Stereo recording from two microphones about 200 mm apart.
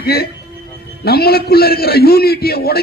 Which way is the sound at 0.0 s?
50° left (ahead or behind).